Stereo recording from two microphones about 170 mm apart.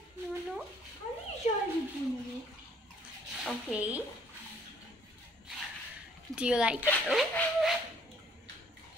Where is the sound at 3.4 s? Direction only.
5° right (ahead or behind).